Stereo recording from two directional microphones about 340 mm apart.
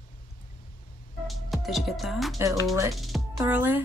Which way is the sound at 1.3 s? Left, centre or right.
Centre.